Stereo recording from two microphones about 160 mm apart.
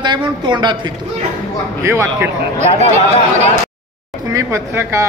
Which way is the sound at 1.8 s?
15° right (ahead or behind).